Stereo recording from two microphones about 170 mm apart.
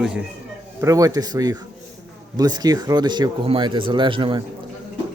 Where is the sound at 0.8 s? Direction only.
20° right (ahead or behind).